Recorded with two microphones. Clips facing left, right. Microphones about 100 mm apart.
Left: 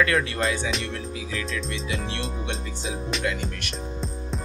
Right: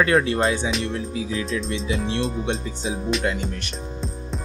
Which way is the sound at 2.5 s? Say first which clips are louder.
Right 4 dB; 35° right (ahead or behind).